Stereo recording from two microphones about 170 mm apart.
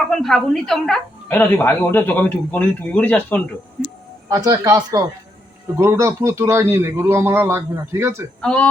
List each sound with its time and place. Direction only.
0.1 s a woman's voice: centre (ahead or behind)
3.8 s a sound: centre (ahead or behind)
4.3 s a man's voice: 20° right (ahead or behind)
8.4 s speech: 5° left (ahead or behind)